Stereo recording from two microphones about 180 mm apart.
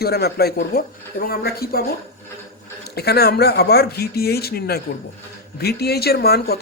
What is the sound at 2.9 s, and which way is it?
Speech, 60° left (ahead or behind).